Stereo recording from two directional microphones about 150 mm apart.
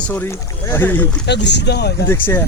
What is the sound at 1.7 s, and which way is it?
Speech, 90° left.